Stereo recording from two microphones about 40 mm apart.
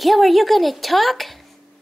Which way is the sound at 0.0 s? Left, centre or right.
Centre.